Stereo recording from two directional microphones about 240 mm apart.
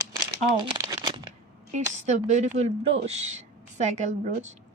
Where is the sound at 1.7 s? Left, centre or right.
Right.